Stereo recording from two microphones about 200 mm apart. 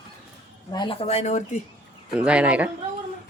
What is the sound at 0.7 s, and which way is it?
Speech, 25° left (ahead or behind).